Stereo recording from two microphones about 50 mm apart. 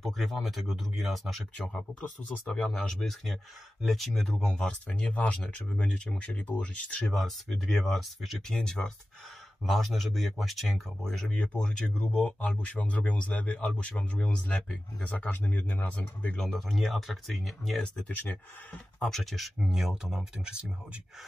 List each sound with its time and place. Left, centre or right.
0.0 s speech: centre
4.5 s speech: centre
7.1 s speech: centre
8.5 s speech: centre
9.6 s speech: centre; by 15.2 s left
15.2 s speech: left
16.3 s speech: centre
18.1 s speech: left
18.9 s speech: centre
19.6 s speech: centre